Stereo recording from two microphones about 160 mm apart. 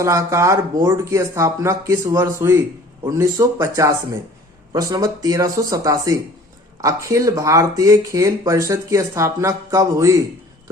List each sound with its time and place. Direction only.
0.0 s speech: 20° right (ahead or behind)